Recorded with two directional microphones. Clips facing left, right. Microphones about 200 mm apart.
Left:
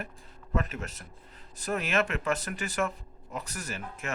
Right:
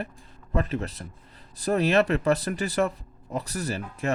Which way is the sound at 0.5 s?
35° right (ahead or behind).